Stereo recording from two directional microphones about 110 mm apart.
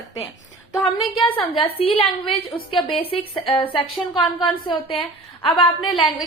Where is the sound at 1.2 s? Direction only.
55° left (ahead or behind).